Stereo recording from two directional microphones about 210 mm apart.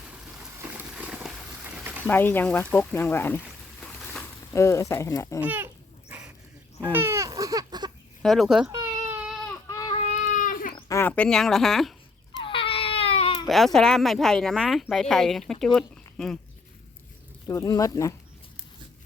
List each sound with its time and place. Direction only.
0.6 s a sound: 5° right (ahead or behind)
2.0 s speech: 10° left (ahead or behind)
5.4 s speech: 10° right (ahead or behind)
6.1 s dog: 5° right (ahead or behind)
6.9 s a sound: 10° right (ahead or behind)
8.2 s speech: centre (ahead or behind)
8.7 s baby cry: 10° right (ahead or behind)
9.6 s baby cry: 15° left (ahead or behind)
10.2 s a sound: 40° left (ahead or behind)
10.8 s speech: 15° left (ahead or behind)
12.4 s baby cry: 25° left (ahead or behind)
13.7 s speech: centre (ahead or behind)
17.5 s speech: 15° left (ahead or behind)